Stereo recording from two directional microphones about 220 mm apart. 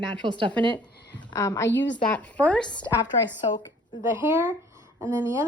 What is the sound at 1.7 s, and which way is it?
Speech, 55° left (ahead or behind).